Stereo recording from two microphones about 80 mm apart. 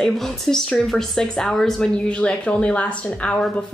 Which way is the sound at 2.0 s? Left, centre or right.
Centre.